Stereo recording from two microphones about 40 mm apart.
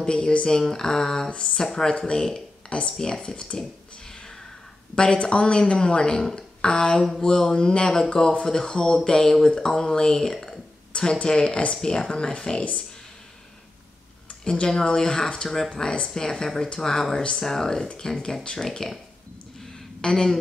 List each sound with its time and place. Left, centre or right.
0.1 s a woman's voice: left
0.5 s speech: centre
1.3 s a woman's voice: left
1.6 s speech: centre
2.0 s a woman's voice: left
4.9 s a woman's voice: left; by 10.6 s centre
10.9 s a woman's voice: left
14.4 s a woman's voice: left
15.4 s speech: centre
15.7 s a woman's voice: left
17.5 s speech: centre
20.0 s speech: centre